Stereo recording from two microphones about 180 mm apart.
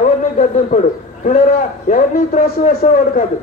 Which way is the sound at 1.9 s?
45° left (ahead or behind).